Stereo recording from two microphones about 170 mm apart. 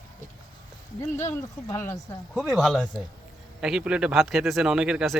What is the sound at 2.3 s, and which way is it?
Speech, centre (ahead or behind).